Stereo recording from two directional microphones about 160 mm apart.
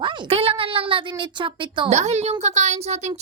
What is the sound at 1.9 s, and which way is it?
Speech, 45° right (ahead or behind).